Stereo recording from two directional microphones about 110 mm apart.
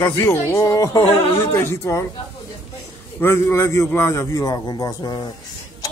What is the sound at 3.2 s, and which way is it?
A man's voice, 20° left (ahead or behind).